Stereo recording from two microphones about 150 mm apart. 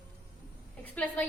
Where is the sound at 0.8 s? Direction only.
10° left (ahead or behind).